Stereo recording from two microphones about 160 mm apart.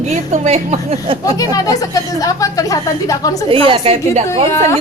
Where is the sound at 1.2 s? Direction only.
20° left (ahead or behind).